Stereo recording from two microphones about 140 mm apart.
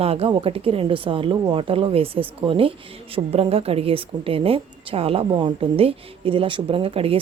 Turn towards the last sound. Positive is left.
turn(degrees=-45)  # may be behind; listen again after turning